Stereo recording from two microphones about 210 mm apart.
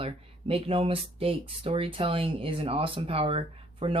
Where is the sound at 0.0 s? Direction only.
25° right (ahead or behind).